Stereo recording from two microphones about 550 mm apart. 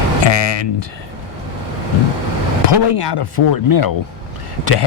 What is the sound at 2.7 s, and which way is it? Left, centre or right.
Speech, left.